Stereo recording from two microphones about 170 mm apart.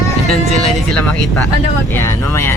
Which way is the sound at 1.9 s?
15° left (ahead or behind).